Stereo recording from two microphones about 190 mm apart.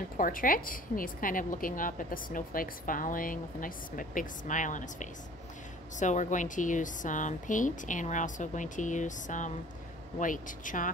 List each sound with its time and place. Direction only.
0.2 s a woman's voice: 45° left (ahead or behind)